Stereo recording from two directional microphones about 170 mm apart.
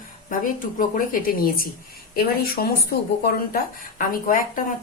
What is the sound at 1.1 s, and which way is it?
A woman's voice, 55° left (ahead or behind).